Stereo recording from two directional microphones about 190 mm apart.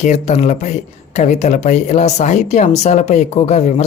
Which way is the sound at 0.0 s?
40° left (ahead or behind).